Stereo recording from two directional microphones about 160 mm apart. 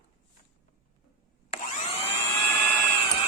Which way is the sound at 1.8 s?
40° left (ahead or behind).